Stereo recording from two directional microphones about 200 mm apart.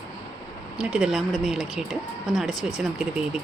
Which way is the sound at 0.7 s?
5° right (ahead or behind).